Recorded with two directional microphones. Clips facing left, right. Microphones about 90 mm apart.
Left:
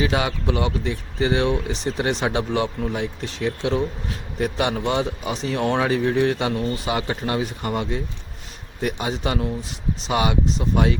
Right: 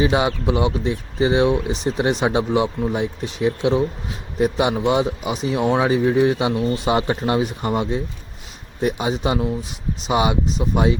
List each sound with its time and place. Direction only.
0.0 s speech: 25° right (ahead or behind)
6.7 s speech: 25° right (ahead or behind)